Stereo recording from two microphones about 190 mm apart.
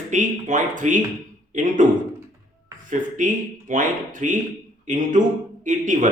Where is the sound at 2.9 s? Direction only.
45° right (ahead or behind).